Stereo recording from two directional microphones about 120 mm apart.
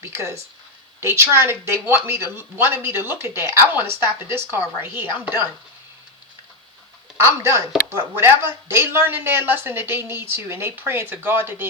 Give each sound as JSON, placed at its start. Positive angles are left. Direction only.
{"t": 0.0, "sound": "speech", "side_deg": -20}
{"t": 7.3, "sound": "speech", "side_deg": -25}